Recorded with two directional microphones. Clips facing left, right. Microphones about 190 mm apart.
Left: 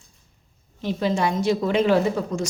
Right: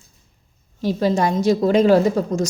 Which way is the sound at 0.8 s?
40° right (ahead or behind).